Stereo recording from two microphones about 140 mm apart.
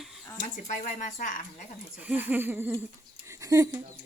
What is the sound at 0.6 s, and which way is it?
A woman's voice, 60° left (ahead or behind).